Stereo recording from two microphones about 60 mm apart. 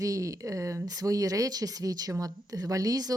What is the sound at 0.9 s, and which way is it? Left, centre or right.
Speech, right.